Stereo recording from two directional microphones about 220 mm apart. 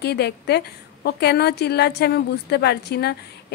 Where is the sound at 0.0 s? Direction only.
45° left (ahead or behind).